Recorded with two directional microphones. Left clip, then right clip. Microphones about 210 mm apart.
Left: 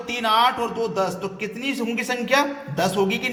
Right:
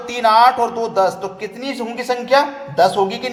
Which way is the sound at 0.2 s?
5° left (ahead or behind).